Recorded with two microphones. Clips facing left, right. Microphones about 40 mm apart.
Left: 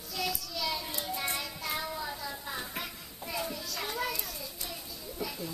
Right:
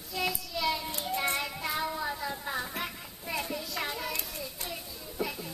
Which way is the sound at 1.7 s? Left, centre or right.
Centre.